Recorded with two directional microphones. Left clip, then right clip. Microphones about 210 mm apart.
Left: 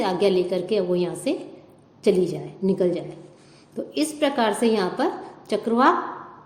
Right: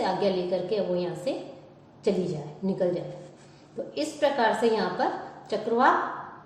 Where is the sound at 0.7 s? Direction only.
55° left (ahead or behind).